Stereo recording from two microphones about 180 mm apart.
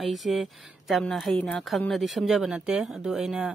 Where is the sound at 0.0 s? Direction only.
Centre (ahead or behind).